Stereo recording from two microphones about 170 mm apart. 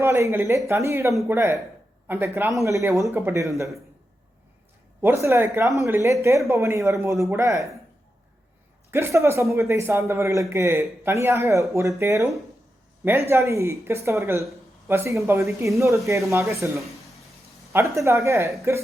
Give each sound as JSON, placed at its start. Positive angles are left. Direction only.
{"t": 0.0, "sound": "speech", "side_deg": -15}
{"t": 4.9, "sound": "speech", "side_deg": -15}
{"t": 8.9, "sound": "speech", "side_deg": -15}
{"t": 16.7, "sound": "speech", "side_deg": 0}
{"t": 17.7, "sound": "speech", "side_deg": -15}